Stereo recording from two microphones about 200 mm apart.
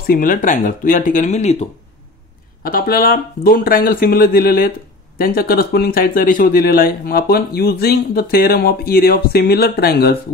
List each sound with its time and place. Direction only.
0.0 s speech: 45° left (ahead or behind)
2.6 s speech: 45° left (ahead or behind)